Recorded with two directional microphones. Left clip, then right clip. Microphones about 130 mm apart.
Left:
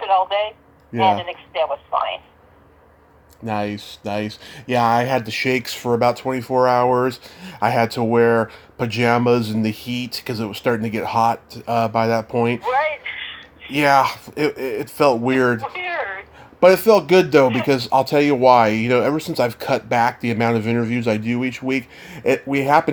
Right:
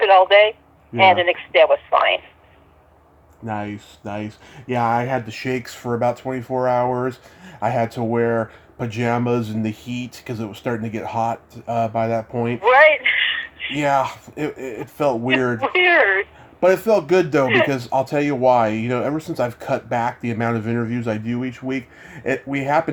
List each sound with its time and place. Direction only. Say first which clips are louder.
0.0 s speech: right 6 dB; 40° right (ahead or behind)
3.4 s speech: left 4 dB; 15° left (ahead or behind)
12.6 s a sound: right 8 dB; 45° right (ahead or behind)
13.7 s speech: left 4 dB; 20° left (ahead or behind)
15.6 s speech: right 10 dB; 40° right (ahead or behind)
16.6 s speech: left 4 dB; 15° left (ahead or behind)